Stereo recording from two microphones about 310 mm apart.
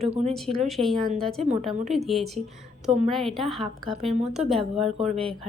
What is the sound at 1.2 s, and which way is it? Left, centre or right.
Speech, centre.